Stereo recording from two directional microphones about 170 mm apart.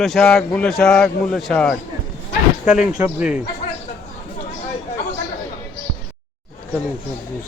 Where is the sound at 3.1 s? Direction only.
5° right (ahead or behind).